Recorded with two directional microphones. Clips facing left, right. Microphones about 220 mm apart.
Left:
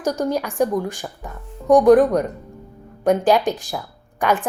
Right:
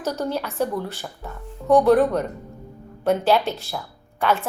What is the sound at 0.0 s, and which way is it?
A woman's voice, 15° left (ahead or behind).